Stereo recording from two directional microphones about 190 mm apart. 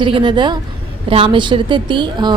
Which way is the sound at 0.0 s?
25° right (ahead or behind).